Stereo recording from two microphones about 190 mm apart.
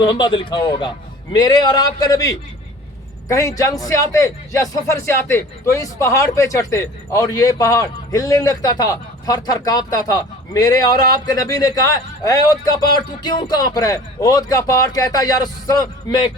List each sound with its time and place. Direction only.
0.0 s speech: 25° left (ahead or behind)